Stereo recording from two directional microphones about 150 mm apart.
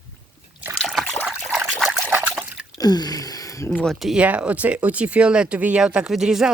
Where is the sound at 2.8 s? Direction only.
25° left (ahead or behind).